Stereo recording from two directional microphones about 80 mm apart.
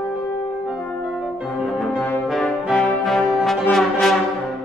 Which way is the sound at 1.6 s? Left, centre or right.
Centre.